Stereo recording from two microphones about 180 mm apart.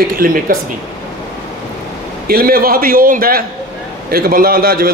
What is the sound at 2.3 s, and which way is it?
A man's voice, 55° right (ahead or behind).